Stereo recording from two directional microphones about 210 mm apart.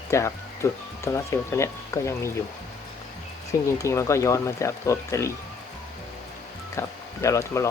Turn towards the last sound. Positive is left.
turn(degrees=15)  # may be behind; listen again after turning